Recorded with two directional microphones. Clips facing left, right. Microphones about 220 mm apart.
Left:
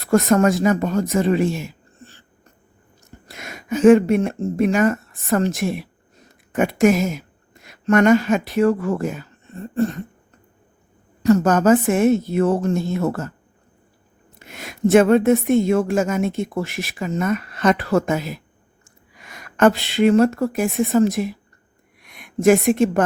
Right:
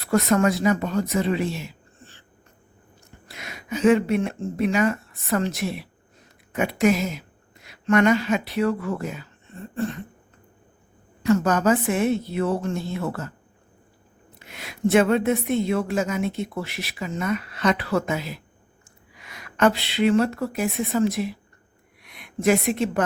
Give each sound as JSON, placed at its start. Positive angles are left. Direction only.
{"t": 0.0, "sound": "speech", "side_deg": 45}
{"t": 3.2, "sound": "a woman's voice", "side_deg": 45}
{"t": 11.2, "sound": "a woman's voice", "side_deg": 40}
{"t": 14.3, "sound": "a woman's voice", "side_deg": 45}